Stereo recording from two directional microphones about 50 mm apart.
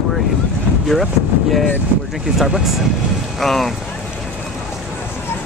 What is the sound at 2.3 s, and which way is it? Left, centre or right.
Speech, centre.